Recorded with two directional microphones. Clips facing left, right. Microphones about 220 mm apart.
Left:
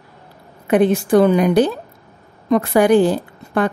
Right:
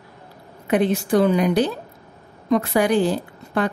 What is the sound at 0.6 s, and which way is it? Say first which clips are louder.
A woman's voice: left 5 dB; 50° left (ahead or behind).